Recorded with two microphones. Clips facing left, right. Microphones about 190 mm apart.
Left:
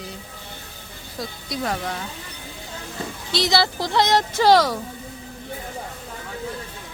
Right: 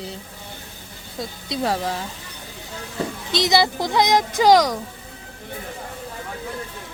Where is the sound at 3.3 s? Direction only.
20° right (ahead or behind).